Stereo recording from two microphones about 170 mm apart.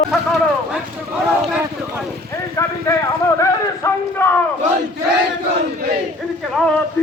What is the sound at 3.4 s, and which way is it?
Speech, 20° left (ahead or behind).